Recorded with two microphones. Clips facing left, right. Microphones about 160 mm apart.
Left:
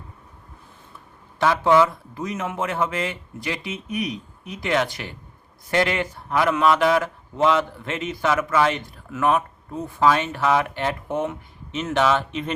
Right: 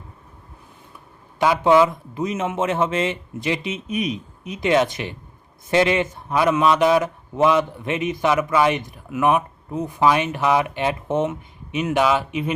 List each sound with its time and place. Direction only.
1.4 s a man's voice: 15° right (ahead or behind)